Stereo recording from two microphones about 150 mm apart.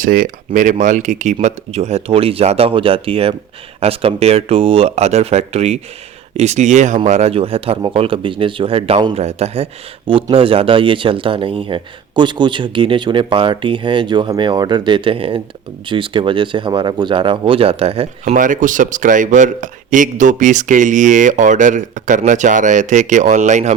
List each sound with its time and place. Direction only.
0.0 s speech: 65° right (ahead or behind); by 9.1 s 35° right (ahead or behind)
9.1 s speech: 45° right (ahead or behind)
18.3 s a man's voice: 60° right (ahead or behind)